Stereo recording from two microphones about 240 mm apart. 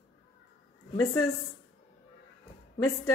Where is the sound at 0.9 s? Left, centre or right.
Centre.